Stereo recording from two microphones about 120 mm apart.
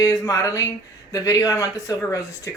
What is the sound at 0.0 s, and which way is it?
Speech, 30° left (ahead or behind).